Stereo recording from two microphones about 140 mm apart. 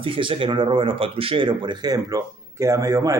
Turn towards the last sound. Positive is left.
turn(degrees=-25)  # may be behind; listen again after turning